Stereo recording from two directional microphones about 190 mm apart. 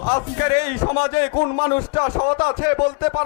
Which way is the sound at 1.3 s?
25° left (ahead or behind).